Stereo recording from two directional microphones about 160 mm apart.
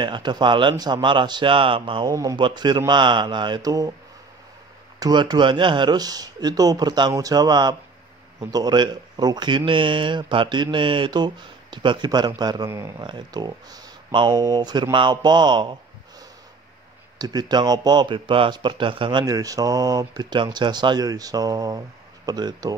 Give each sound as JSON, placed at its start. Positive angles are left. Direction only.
{"t": 0.0, "sound": "a man's voice", "side_deg": -30}
{"t": 2.0, "sound": "speech", "side_deg": -20}
{"t": 5.0, "sound": "speech", "side_deg": -25}
{"t": 17.2, "sound": "speech", "side_deg": -25}